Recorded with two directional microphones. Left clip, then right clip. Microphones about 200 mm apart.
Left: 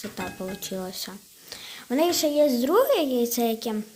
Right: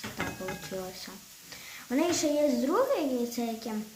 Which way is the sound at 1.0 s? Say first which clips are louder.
Left 7 dB; 50° left (ahead or behind).